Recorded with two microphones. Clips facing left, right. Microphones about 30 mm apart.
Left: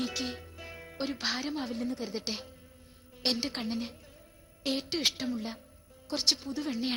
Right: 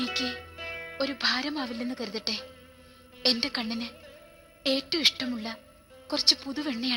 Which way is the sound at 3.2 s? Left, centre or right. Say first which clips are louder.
Right 4 dB; right.